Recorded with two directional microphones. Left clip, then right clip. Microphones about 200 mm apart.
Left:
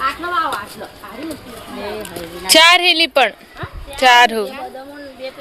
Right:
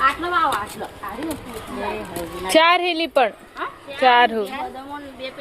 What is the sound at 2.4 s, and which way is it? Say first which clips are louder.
A woman's voice: left 6 dB; 5° left (ahead or behind).